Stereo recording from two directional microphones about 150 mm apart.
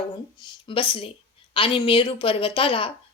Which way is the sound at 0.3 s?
30° left (ahead or behind).